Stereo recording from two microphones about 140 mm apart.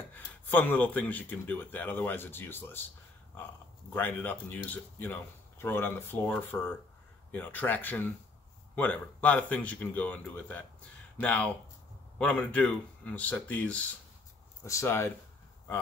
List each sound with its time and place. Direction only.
0.1 s speech: 15° left (ahead or behind)
3.9 s speech: 15° left (ahead or behind)
14.6 s speech: 20° left (ahead or behind)